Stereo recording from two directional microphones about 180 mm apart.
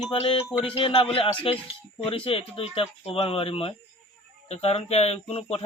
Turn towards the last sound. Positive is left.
turn(degrees=35)  # may be behind; listen again after turning